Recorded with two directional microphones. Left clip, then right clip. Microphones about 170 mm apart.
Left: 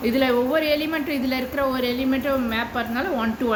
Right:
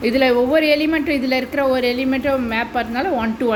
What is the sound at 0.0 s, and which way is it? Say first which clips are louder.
A woman's voice: right 5 dB; 30° right (ahead or behind).